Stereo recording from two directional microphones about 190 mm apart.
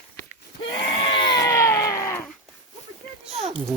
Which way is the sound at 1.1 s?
25° left (ahead or behind).